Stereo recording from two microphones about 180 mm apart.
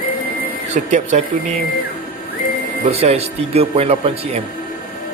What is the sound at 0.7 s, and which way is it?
Speech, 40° right (ahead or behind).